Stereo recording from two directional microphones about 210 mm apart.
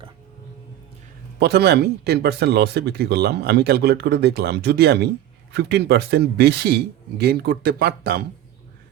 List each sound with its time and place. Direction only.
1.4 s speech: 50° right (ahead or behind)